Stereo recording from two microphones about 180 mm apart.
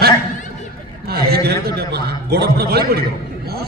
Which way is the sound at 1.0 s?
60° right (ahead or behind).